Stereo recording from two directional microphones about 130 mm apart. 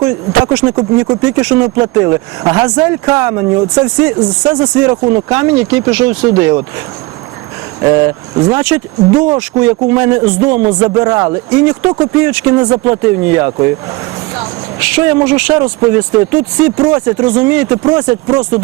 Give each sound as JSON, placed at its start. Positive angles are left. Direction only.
{"t": 0.0, "sound": "speech", "side_deg": -25}
{"t": 7.8, "sound": "speech", "side_deg": -30}